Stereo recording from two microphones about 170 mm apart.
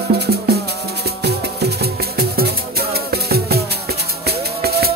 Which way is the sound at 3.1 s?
70° right (ahead or behind).